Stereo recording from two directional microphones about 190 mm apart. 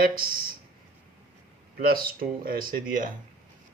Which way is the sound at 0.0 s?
50° right (ahead or behind).